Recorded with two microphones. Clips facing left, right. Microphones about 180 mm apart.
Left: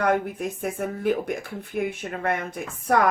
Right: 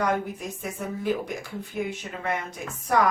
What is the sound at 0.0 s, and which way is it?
Speech, 55° left (ahead or behind).